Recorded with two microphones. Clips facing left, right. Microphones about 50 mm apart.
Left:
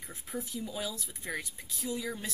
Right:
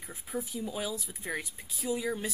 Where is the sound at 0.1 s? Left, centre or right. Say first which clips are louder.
Right 2 dB; centre.